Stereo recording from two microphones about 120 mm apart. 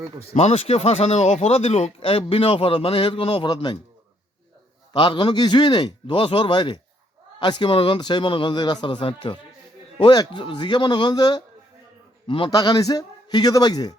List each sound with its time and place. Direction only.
0.3 s speech: 65° left (ahead or behind); by 3.8 s 40° left (ahead or behind)
4.9 s speech: 40° left (ahead or behind)
7.7 s speech: 50° left (ahead or behind)
7.9 s speech: 40° left (ahead or behind)
12.5 s speech: 35° left (ahead or behind)